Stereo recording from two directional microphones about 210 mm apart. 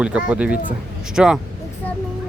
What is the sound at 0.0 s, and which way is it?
Speech, 5° right (ahead or behind).